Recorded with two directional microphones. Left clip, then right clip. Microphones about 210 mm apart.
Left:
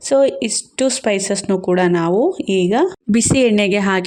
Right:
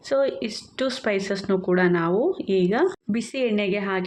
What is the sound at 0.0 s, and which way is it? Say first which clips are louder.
Speech: left 8 dB; 40° left (ahead or behind).